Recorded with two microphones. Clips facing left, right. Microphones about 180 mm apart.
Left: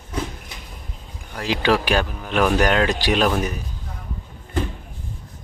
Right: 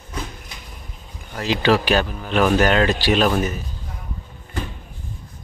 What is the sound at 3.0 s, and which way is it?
Speech, 15° left (ahead or behind).